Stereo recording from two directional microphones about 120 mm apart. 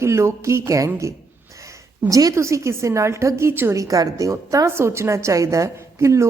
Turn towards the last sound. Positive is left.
turn(degrees=-25)  # may be behind; listen again after turning